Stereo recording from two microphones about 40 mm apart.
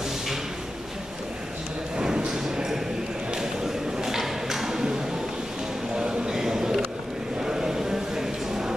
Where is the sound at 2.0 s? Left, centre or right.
Centre.